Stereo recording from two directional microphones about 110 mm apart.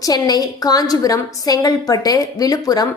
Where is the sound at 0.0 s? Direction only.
35° left (ahead or behind).